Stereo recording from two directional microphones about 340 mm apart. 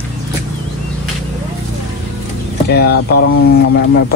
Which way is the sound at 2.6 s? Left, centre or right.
Left.